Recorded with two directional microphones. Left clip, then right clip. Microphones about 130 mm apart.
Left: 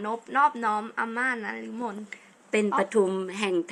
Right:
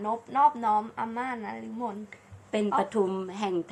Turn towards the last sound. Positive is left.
turn(degrees=0)  # may be behind; listen again after turning